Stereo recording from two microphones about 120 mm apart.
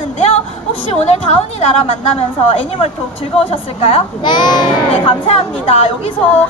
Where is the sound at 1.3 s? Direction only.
55° left (ahead or behind).